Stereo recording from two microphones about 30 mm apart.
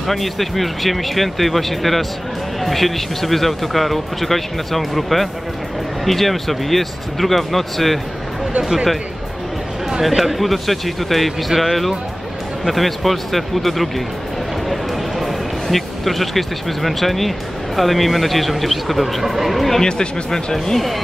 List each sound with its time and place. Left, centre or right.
0.0 s speech: centre
10.0 s speech: centre
12.7 s speech: centre
14.7 s music: centre
17.7 s speech: centre
19.8 s speech: left
20.7 s speech: centre